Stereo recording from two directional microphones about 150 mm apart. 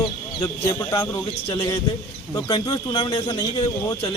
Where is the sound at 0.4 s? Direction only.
25° left (ahead or behind).